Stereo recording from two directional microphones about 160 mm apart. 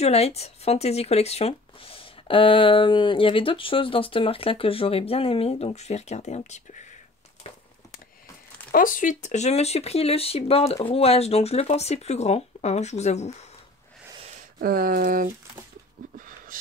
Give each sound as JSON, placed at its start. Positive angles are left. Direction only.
{"t": 0.0, "sound": "speech", "side_deg": 40}
{"t": 8.7, "sound": "speech", "side_deg": 60}
{"t": 14.6, "sound": "speech", "side_deg": -65}
{"t": 16.0, "sound": "a sound", "side_deg": -55}